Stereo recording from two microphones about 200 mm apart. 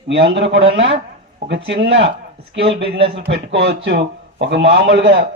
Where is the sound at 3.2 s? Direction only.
60° right (ahead or behind).